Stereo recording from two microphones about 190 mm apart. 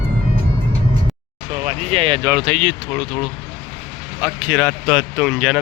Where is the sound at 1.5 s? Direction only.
35° right (ahead or behind).